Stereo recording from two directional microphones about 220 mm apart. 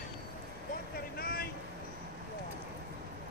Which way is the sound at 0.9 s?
45° left (ahead or behind).